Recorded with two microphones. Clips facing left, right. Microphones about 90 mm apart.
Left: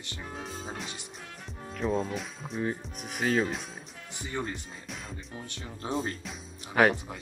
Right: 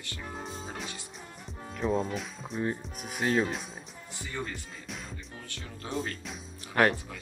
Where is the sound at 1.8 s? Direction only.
Centre (ahead or behind).